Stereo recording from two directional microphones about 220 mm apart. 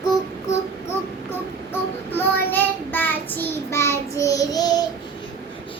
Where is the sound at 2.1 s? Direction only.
10° left (ahead or behind).